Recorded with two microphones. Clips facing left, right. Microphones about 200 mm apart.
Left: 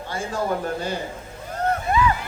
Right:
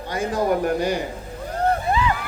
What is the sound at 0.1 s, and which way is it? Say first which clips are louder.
Speech: right 4 dB; 15° right (ahead or behind).